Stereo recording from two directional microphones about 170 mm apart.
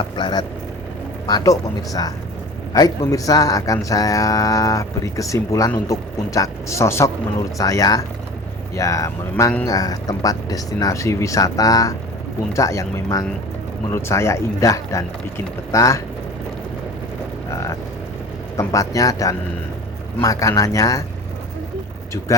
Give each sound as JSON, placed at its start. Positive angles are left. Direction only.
{"t": 0.2, "sound": "speech", "side_deg": 25}
{"t": 17.5, "sound": "cattle", "side_deg": 15}
{"t": 18.5, "sound": "speech", "side_deg": 20}